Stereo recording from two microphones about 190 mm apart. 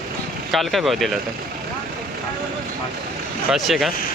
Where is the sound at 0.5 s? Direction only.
Centre (ahead or behind).